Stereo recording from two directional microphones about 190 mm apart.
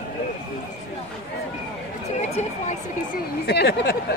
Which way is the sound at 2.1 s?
40° left (ahead or behind).